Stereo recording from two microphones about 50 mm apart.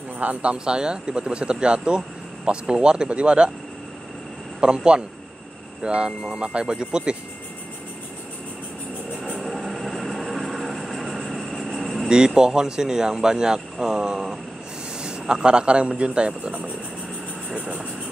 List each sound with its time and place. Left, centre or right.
0.2 s speech: right
4.6 s speech: centre
9.4 s train: centre
11.2 s vehicle: centre
12.4 s speech: centre